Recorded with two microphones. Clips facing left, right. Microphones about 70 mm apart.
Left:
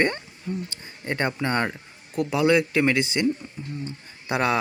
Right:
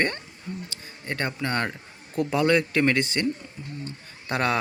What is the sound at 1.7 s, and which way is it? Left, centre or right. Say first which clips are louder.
Speech: left 1 dB; centre.